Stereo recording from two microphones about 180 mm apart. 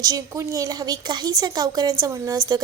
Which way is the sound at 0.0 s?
20° right (ahead or behind).